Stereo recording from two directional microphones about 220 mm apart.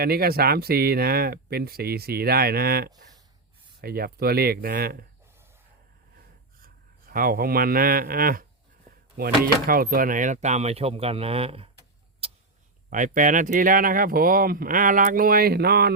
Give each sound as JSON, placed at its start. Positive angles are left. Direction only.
{"t": 0.0, "sound": "speech", "side_deg": -45}
{"t": 7.1, "sound": "speech", "side_deg": -40}
{"t": 12.2, "sound": "a sound", "side_deg": -25}
{"t": 12.9, "sound": "speech", "side_deg": -35}